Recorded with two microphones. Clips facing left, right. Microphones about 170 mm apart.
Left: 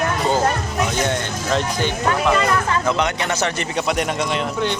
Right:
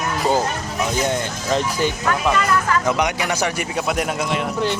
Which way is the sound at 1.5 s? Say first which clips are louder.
Right 1 dB; 5° right (ahead or behind).